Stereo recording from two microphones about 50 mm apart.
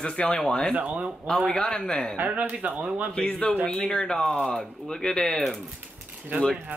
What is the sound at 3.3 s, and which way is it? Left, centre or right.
Speech, left.